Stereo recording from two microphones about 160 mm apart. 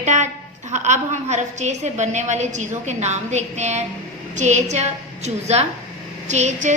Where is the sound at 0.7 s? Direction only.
50° right (ahead or behind).